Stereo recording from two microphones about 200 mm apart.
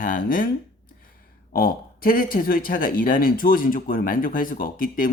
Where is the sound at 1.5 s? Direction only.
45° left (ahead or behind).